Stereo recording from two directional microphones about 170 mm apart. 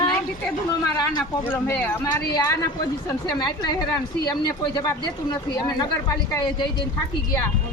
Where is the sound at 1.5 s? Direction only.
10° left (ahead or behind).